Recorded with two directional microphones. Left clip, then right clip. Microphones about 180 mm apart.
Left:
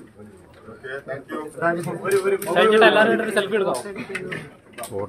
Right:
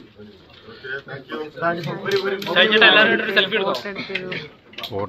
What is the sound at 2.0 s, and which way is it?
A man's voice, 40° left (ahead or behind).